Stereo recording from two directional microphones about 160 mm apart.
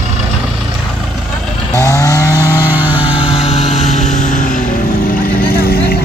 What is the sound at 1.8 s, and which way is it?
Chainsaw, 20° left (ahead or behind).